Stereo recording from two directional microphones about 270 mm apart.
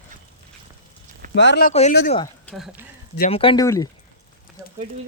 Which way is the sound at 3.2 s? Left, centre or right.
Left.